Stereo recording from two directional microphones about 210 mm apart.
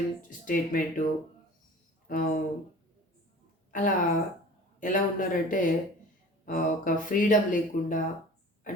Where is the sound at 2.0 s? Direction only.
40° left (ahead or behind).